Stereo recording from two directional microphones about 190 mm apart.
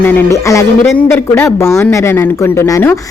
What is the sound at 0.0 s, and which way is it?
Speech, 10° left (ahead or behind).